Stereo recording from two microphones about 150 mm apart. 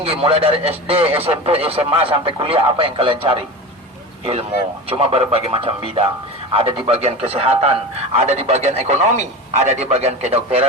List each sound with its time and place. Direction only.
0.0 s a man's voice: 40° right (ahead or behind)
4.9 s a man's voice: 40° right (ahead or behind)